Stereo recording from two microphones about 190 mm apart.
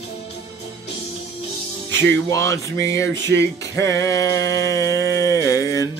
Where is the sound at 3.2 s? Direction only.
65° right (ahead or behind).